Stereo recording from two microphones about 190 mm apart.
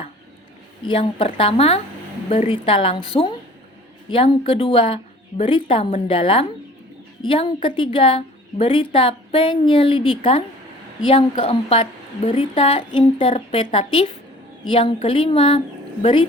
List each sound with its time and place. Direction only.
0.9 s a woman's voice: 30° left (ahead or behind)